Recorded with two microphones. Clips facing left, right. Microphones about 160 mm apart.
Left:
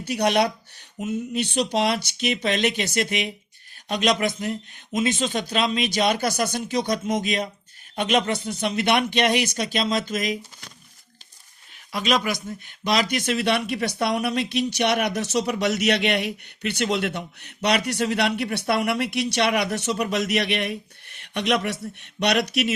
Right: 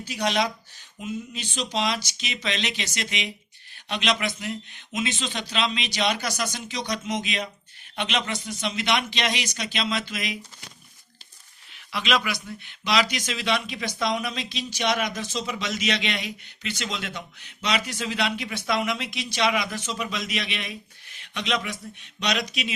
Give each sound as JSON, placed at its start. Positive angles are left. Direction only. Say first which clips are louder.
{"t": 0.0, "sound": "speech", "louder": "left 5 dB", "side_deg": 60}
{"t": 11.9, "sound": "speech", "louder": "left 3 dB", "side_deg": 40}